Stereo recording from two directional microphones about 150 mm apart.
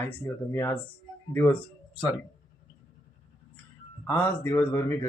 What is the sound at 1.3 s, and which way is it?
Speech, 15° left (ahead or behind).